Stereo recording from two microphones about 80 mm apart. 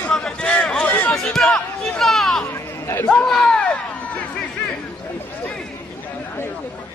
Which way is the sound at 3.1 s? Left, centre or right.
Centre.